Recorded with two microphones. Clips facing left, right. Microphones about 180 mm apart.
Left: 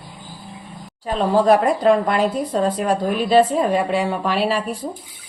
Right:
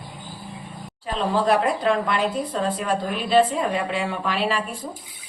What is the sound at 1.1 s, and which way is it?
A woman's voice, 40° left (ahead or behind).